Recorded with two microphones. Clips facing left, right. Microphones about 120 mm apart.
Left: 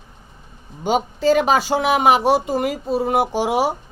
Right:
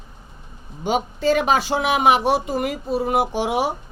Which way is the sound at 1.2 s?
35° left (ahead or behind).